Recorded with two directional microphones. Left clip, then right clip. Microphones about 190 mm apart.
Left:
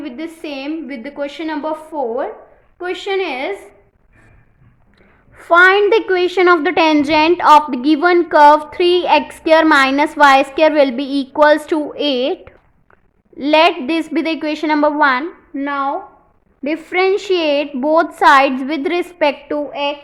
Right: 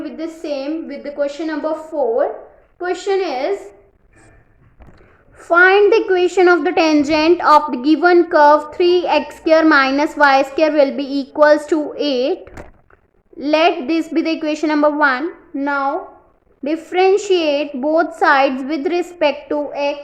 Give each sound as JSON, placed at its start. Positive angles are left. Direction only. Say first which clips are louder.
{"t": 0.3, "sound": "a woman's voice", "louder": "right 4 dB", "side_deg": 35}
{"t": 5.4, "sound": "a child's voice", "louder": "left 1 dB", "side_deg": 15}